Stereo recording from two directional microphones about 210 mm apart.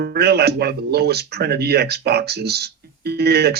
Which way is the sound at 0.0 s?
50° right (ahead or behind).